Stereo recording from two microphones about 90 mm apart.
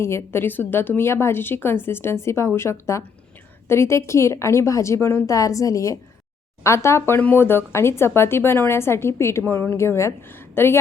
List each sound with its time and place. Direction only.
0.0 s a woman's voice: 25° left (ahead or behind)